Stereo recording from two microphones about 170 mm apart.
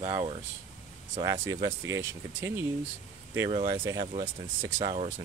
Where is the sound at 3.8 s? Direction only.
20° right (ahead or behind).